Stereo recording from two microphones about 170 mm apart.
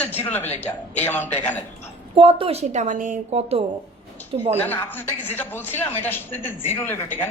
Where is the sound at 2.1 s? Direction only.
30° right (ahead or behind).